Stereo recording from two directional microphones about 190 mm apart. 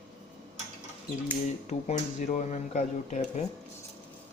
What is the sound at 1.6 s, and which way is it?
Speech, 40° left (ahead or behind).